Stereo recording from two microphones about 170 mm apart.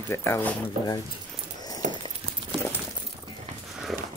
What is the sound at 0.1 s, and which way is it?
Speech, 15° left (ahead or behind).